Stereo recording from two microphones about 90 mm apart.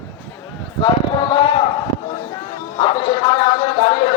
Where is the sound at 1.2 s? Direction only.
65° left (ahead or behind).